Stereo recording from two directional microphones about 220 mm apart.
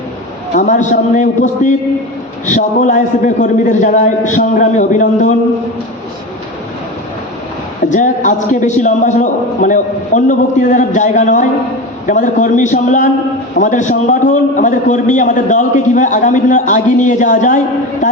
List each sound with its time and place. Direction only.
0.5 s a man's voice: 35° left (ahead or behind)
7.9 s a man's voice: 35° left (ahead or behind)